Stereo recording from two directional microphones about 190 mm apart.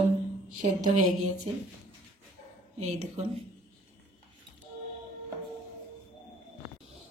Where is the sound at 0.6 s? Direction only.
40° right (ahead or behind).